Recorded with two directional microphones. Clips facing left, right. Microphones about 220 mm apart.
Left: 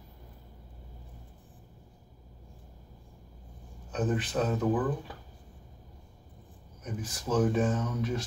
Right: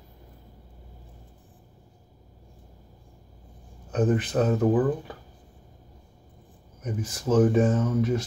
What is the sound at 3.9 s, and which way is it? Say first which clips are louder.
Speech: right 6 dB; 50° right (ahead or behind).